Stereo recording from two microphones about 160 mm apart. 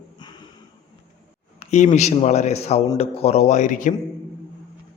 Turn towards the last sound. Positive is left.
turn(degrees=55)  # may be behind; listen again after turning